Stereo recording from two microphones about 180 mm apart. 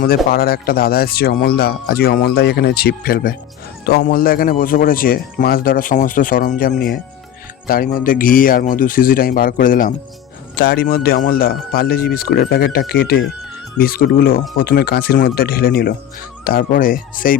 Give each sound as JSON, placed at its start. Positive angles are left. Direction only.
{"t": 0.3, "sound": "speech", "side_deg": 55}
{"t": 10.5, "sound": "speech", "side_deg": 60}